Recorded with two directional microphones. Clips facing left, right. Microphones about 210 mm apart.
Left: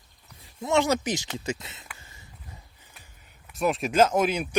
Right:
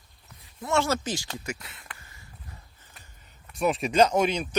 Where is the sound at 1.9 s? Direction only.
25° left (ahead or behind).